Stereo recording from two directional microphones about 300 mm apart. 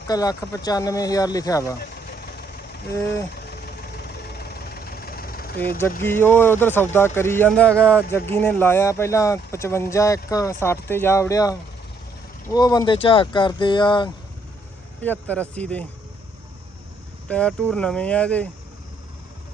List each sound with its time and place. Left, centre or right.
0.1 s speech: centre
1.8 s vehicle: left
3.4 s engine knocking: left
6.0 s speech: centre
17.2 s speech: centre